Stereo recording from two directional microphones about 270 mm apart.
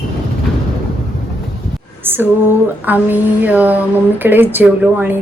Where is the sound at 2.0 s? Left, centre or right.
Centre.